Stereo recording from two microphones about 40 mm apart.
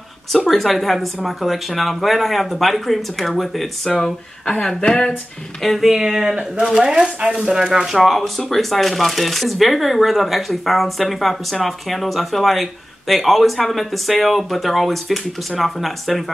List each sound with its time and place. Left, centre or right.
0.5 s speech: centre
5.6 s speech: centre
5.9 s speech: centre
7.9 s speech: centre